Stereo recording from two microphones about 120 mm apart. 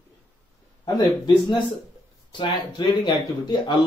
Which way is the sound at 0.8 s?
35° left (ahead or behind).